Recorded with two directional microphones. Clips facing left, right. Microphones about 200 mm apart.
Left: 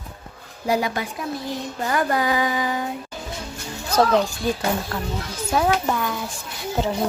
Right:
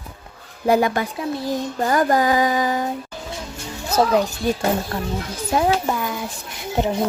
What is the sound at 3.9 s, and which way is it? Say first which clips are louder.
Speech: right 1 dB; 10° right (ahead or behind).